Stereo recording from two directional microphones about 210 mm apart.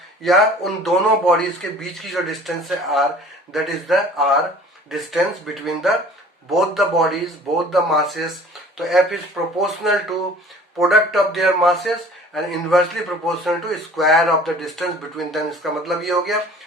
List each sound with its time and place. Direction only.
0.2 s speech: centre (ahead or behind)